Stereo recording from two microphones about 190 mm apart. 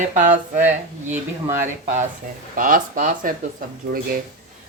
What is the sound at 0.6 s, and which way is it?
A woman's voice, 10° right (ahead or behind).